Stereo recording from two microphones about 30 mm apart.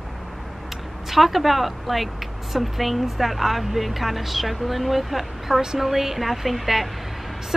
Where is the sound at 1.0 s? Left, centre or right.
Centre.